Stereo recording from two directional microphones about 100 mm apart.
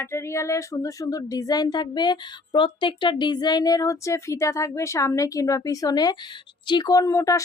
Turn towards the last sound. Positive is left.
turn(degrees=35)  # may be behind; listen again after turning